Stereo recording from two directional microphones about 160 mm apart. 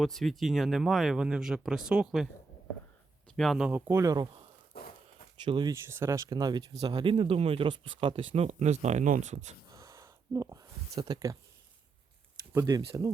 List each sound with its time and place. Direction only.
0.0 s speech: centre (ahead or behind)
3.3 s speech: centre (ahead or behind); by 4.4 s 25° right (ahead or behind)
4.7 s walk: 75° left (ahead or behind)
5.5 s speech: 30° right (ahead or behind)
5.7 s speech: 15° right (ahead or behind); by 8.4 s 35° right (ahead or behind)
8.4 s speech: 45° right (ahead or behind)
9.6 s a sound: 20° right (ahead or behind)
12.6 s speech: 25° right (ahead or behind)